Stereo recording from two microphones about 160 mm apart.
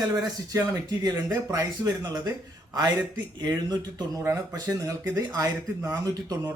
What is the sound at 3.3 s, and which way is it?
Speech, 25° right (ahead or behind).